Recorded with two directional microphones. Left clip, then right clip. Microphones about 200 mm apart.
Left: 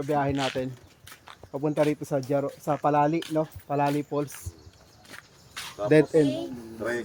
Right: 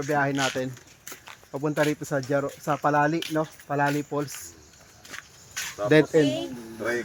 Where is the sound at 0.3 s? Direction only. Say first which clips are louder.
Right 2 dB; 25° right (ahead or behind).